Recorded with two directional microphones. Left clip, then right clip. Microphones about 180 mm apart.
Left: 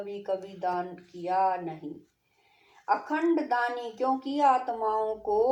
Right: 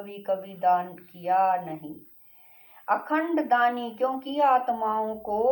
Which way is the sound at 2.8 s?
45° left (ahead or behind).